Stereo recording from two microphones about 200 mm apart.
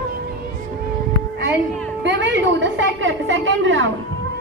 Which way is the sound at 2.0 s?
65° right (ahead or behind).